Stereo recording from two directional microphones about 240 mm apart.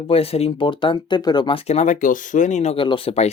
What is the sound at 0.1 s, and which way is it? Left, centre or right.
Speech, left.